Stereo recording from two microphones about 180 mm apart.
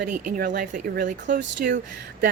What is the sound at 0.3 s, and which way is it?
Speech, 50° right (ahead or behind).